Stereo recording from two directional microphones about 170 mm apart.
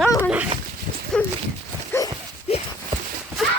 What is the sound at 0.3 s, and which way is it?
Dog, 5° right (ahead or behind).